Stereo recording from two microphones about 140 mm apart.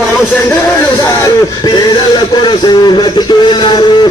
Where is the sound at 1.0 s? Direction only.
25° left (ahead or behind).